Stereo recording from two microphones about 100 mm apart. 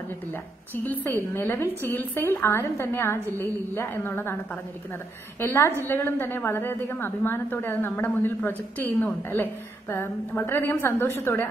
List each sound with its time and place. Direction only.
0.3 s a woman's voice: 20° left (ahead or behind)
5.4 s a woman's voice: 20° left (ahead or behind)